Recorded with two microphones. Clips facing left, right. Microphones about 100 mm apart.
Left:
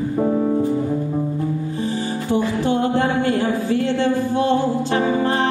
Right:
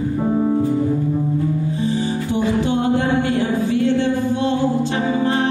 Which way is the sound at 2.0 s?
20° right (ahead or behind).